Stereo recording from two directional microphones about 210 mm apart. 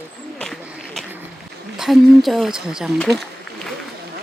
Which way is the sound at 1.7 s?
Centre (ahead or behind).